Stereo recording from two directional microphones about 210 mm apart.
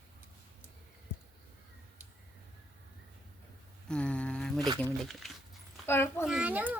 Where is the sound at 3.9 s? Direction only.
5° left (ahead or behind).